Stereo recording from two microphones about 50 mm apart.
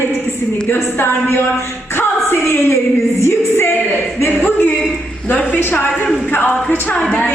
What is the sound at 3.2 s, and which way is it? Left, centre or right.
Music, left.